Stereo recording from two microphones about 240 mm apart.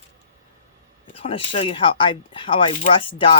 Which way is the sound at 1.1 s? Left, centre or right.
Left.